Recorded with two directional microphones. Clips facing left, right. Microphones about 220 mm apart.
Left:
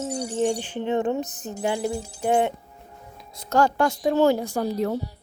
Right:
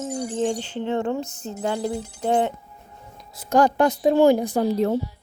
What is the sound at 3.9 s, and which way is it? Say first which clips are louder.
Speech: right 4 dB; 30° right (ahead or behind).